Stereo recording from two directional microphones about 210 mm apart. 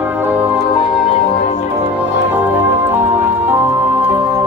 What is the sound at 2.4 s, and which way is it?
Music, 10° right (ahead or behind).